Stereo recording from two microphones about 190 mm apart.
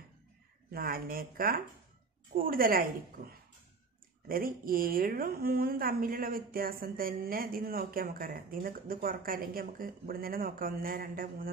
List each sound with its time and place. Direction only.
0.7 s speech: 50° right (ahead or behind)